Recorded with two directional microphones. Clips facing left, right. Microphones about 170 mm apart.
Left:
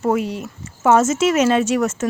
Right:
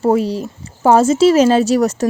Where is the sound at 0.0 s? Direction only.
35° right (ahead or behind).